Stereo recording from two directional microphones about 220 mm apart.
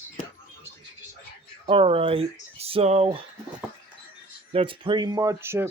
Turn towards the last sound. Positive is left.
turn(degrees=-10)  # may be behind; listen again after turning